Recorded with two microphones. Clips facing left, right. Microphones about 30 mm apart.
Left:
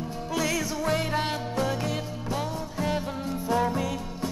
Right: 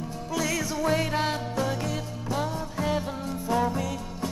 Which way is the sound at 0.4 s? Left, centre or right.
Centre.